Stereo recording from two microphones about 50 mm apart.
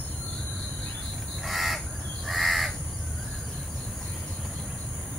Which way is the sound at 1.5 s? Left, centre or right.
Centre.